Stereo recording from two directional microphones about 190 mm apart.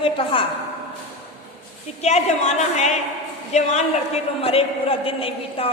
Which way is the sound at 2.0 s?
35° left (ahead or behind).